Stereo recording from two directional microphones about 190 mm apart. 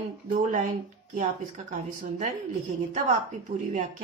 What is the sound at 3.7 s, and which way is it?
Speech, 40° right (ahead or behind).